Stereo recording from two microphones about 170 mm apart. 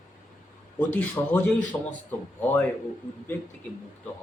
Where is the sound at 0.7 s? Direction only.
10° left (ahead or behind).